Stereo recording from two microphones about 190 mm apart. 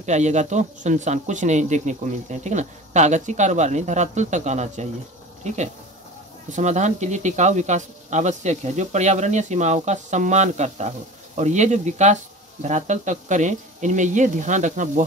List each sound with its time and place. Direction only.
0.0 s speech: 35° right (ahead or behind)